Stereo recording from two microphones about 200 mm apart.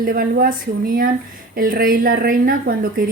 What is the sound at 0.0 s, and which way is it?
Speech, 50° right (ahead or behind).